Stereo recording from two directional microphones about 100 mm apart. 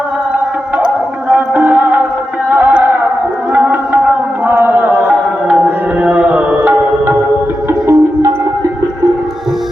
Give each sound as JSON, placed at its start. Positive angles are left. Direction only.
{"t": 1.3, "sound": "music", "side_deg": -15}